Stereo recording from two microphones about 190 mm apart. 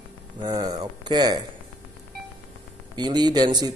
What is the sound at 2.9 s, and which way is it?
Speech, 20° right (ahead or behind).